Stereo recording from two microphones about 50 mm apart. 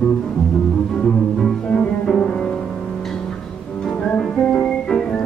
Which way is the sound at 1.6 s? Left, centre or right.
Centre.